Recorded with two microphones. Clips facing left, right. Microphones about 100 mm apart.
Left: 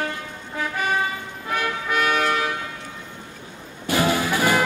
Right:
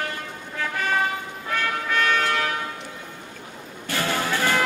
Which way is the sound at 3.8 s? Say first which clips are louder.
Left 4 dB; 15° left (ahead or behind).